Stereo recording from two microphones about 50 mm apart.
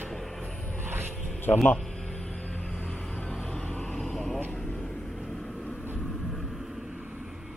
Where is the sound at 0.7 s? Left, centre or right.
Right.